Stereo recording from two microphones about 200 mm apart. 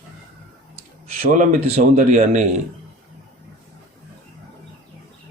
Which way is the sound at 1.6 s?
35° right (ahead or behind).